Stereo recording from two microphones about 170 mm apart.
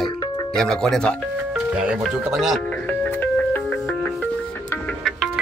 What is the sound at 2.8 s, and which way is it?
Music, 10° left (ahead or behind).